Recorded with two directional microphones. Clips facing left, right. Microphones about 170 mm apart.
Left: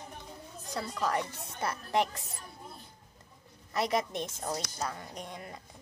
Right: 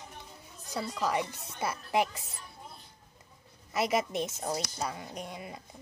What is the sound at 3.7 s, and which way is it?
A woman's voice, 5° right (ahead or behind).